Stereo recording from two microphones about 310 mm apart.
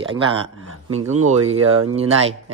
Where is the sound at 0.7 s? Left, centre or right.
Right.